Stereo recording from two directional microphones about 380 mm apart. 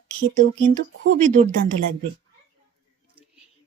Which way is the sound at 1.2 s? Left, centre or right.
Centre.